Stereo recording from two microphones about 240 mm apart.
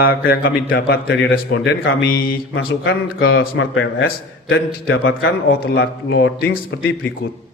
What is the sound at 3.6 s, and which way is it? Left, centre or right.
A man's voice, left.